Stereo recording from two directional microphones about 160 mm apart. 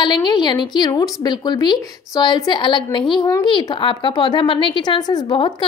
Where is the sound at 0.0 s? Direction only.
30° left (ahead or behind).